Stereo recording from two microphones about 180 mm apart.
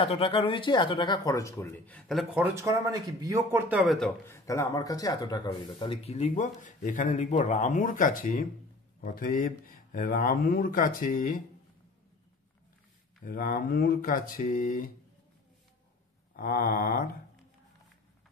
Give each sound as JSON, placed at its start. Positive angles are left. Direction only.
{"t": 0.0, "sound": "speech", "side_deg": 30}
{"t": 2.4, "sound": "speech", "side_deg": -15}
{"t": 3.6, "sound": "speech", "side_deg": -10}
{"t": 4.3, "sound": "speech", "side_deg": 15}
{"t": 6.0, "sound": "speech", "side_deg": 35}
{"t": 13.2, "sound": "speech", "side_deg": 50}
{"t": 16.3, "sound": "speech", "side_deg": 50}